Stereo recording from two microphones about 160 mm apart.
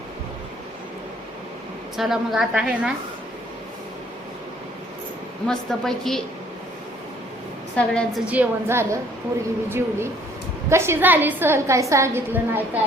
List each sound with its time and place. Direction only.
2.0 s a woman's voice: centre (ahead or behind)
5.5 s a woman's voice: 5° left (ahead or behind)
7.8 s a woman's voice: 5° left (ahead or behind)
8.3 s a woman's voice: 10° right (ahead or behind)